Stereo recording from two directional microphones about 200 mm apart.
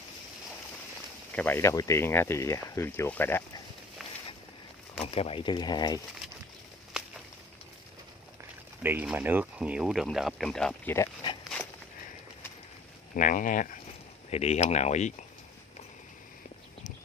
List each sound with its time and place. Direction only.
1.3 s speech: 10° left (ahead or behind)
5.0 s speech: 30° left (ahead or behind)
7.0 s walk: 5° right (ahead or behind)
8.8 s speech: 10° right (ahead or behind)
13.1 s speech: 40° left (ahead or behind)